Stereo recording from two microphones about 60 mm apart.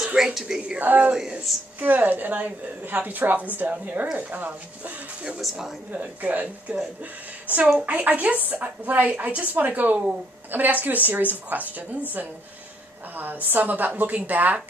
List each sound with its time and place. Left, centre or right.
0.0 s a woman's voice: centre
0.7 s a woman's voice: right
1.1 s a woman's voice: centre
1.8 s a woman's voice: right
5.4 s speech: centre
5.9 s a woman's voice: right
13.1 s a woman's voice: right